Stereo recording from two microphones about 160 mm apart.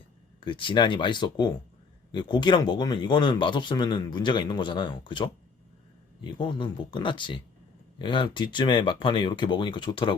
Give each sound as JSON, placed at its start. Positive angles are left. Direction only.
{"t": 0.3, "sound": "speech", "side_deg": 30}